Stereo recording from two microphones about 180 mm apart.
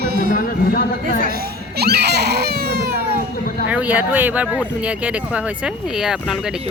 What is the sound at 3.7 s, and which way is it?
Speech, 10° right (ahead or behind).